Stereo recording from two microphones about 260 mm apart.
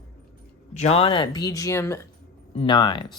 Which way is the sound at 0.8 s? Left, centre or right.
Left.